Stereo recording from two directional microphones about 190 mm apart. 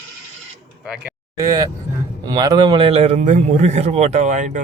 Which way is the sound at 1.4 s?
20° right (ahead or behind).